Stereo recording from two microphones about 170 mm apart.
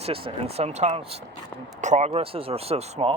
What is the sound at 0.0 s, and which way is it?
Speech, 35° right (ahead or behind).